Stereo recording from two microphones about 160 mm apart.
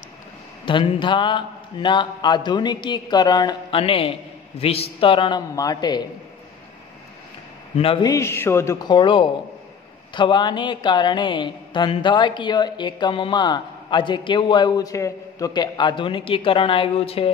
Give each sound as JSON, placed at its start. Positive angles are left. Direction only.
{"t": 0.7, "sound": "a woman's voice", "side_deg": 30}
{"t": 7.7, "sound": "a man's voice", "side_deg": 35}
{"t": 8.1, "sound": "a woman's voice", "side_deg": 15}